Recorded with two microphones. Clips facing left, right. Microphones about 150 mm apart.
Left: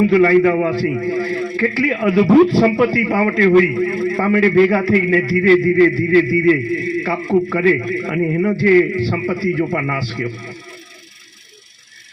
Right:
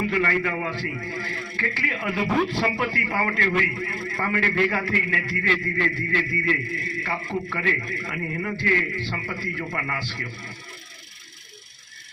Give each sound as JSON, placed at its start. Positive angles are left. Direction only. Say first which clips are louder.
{"t": 0.0, "sound": "a man's voice", "louder": "left 13 dB", "side_deg": 40}